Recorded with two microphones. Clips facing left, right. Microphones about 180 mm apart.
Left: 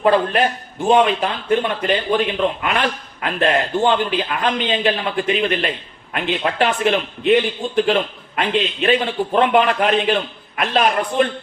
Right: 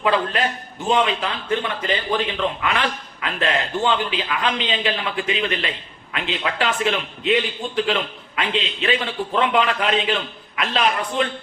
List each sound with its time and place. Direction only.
0.0 s a man's voice: 45° left (ahead or behind)